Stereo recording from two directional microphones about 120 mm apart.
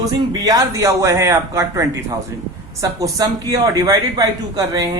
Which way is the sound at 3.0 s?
30° right (ahead or behind).